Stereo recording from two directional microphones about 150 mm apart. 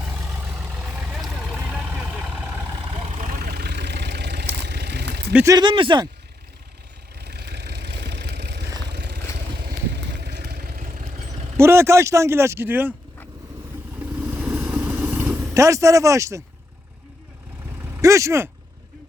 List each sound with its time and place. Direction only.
0.3 s vehicle: 10° right (ahead or behind)
3.1 s vehicle: 50° right (ahead or behind)
3.4 s vehicle: 90° right
5.5 s speech: 30° right (ahead or behind)
7.2 s vehicle: 90° right; by 11.3 s 70° right (ahead or behind)
11.5 s speech: 15° right (ahead or behind)
14.0 s vehicle: 10° right (ahead or behind)
17.9 s speech: 20° right (ahead or behind)